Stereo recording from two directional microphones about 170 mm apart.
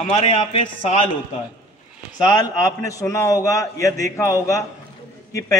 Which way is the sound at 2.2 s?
25° left (ahead or behind).